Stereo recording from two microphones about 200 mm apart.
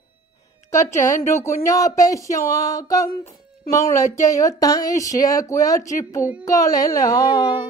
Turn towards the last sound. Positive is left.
turn(degrees=20)  # may be behind; listen again after turning